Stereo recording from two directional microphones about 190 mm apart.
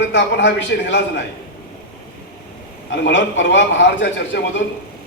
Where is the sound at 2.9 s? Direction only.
75° left (ahead or behind).